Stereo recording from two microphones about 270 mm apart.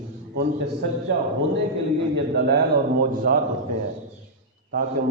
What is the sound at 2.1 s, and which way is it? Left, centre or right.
A man's voice, right.